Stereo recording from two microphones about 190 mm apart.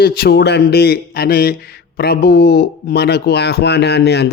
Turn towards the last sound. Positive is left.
turn(degrees=60)  # may be behind; listen again after turning